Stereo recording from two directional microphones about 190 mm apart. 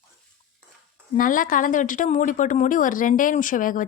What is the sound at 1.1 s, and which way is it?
Speech, 45° left (ahead or behind).